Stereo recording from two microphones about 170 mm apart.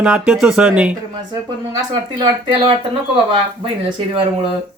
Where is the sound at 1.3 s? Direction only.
25° right (ahead or behind).